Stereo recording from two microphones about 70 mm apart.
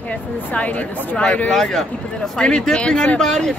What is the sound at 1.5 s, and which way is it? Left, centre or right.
Speech, centre.